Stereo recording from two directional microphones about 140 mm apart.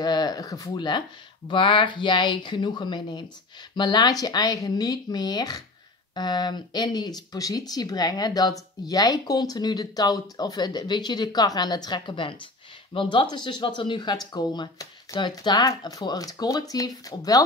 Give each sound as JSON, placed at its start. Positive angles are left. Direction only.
{"t": 0.0, "sound": "speech", "side_deg": 30}